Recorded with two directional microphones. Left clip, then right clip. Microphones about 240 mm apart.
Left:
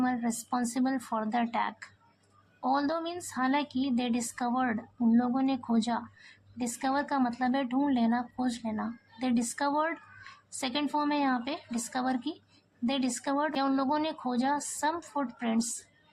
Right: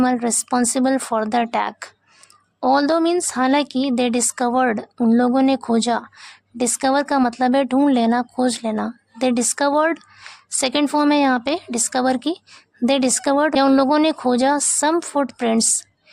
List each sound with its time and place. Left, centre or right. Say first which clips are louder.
0.0 s speech: right 12 dB; right